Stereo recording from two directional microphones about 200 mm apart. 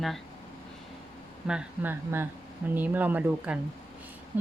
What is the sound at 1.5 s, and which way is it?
Speech, 5° right (ahead or behind).